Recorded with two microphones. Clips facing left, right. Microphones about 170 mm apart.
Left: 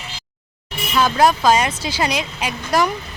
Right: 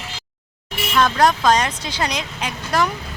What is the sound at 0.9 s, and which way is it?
Speech, 5° left (ahead or behind).